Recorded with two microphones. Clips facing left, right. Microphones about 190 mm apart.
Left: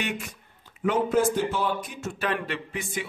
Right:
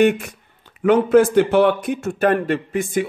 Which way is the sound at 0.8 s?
70° right (ahead or behind).